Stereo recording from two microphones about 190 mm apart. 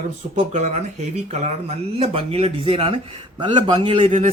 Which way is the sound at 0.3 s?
35° right (ahead or behind).